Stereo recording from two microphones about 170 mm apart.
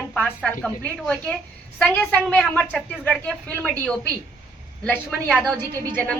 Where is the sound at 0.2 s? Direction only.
10° left (ahead or behind).